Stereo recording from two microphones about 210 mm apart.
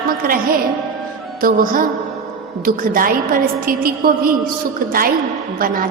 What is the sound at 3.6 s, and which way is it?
Music, 45° right (ahead or behind).